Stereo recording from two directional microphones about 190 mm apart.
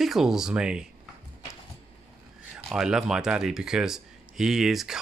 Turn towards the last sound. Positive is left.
turn(degrees=0)  # may be behind; listen again after turning